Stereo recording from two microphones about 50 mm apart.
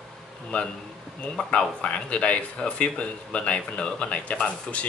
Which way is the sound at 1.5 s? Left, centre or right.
Left.